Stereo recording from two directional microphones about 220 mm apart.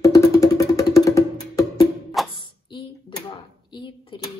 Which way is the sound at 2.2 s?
Centre (ahead or behind).